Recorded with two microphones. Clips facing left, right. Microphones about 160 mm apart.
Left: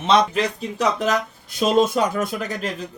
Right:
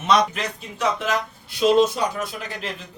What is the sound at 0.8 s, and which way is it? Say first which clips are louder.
Speech: left 2 dB; 40° left (ahead or behind).